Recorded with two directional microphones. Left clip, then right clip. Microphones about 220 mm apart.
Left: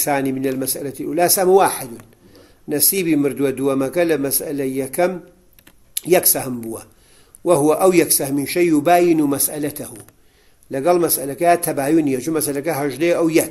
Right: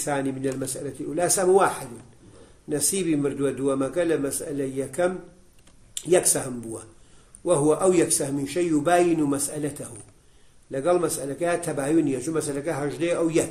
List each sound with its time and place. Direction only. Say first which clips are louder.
0.0 s a man's voice: left 7 dB; 35° left (ahead or behind)
2.7 s a man's voice: left 6 dB; 35° left (ahead or behind)